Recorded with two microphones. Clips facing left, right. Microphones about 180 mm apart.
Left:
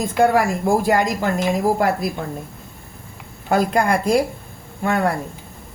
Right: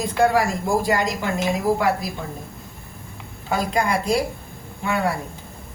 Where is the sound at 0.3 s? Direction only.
50° left (ahead or behind).